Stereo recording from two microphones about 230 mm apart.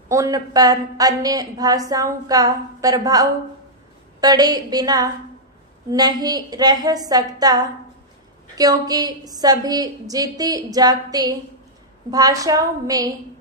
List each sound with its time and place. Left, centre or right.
0.1 s a woman's voice: centre